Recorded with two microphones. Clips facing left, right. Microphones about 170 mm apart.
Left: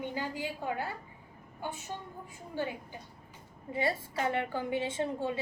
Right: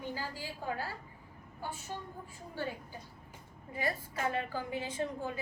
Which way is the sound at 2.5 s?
20° left (ahead or behind).